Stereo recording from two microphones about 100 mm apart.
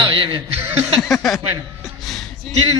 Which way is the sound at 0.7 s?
85° right.